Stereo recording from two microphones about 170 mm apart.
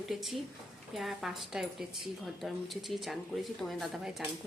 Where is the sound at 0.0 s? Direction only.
Centre (ahead or behind).